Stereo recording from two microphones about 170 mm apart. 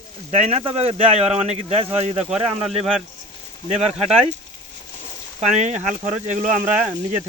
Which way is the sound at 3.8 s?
40° right (ahead or behind).